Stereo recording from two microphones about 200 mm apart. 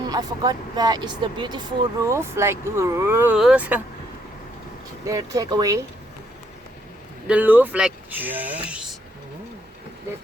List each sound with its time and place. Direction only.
0.0 s speech: 20° right (ahead or behind)
5.0 s speech: 15° right (ahead or behind)
7.3 s speech: 10° right (ahead or behind)